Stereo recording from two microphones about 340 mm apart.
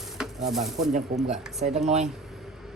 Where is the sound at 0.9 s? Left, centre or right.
Right.